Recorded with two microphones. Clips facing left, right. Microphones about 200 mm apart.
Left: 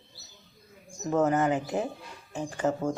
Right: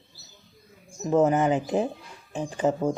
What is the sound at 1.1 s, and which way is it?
Speech, 20° right (ahead or behind).